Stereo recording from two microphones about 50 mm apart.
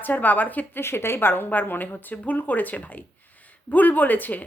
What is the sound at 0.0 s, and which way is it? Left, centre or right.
Speech, left.